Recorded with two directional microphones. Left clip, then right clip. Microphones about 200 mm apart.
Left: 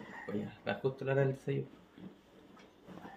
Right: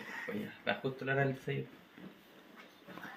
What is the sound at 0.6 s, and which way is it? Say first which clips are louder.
Speech: even; 60° left (ahead or behind).